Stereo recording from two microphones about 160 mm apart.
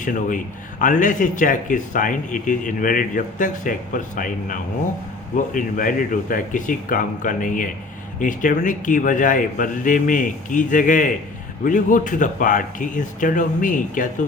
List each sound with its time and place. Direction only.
0.0 s speech: 55° left (ahead or behind)